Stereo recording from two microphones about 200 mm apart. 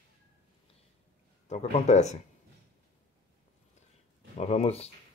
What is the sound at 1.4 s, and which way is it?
Speech, 35° left (ahead or behind).